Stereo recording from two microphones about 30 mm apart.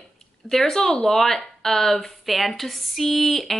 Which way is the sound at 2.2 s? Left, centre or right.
Centre.